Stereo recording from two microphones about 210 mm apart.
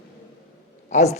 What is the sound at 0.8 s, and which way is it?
Speech, 35° left (ahead or behind).